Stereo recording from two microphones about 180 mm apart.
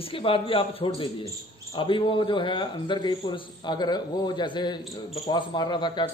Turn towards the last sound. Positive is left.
turn(degrees=25)  # may be behind; listen again after turning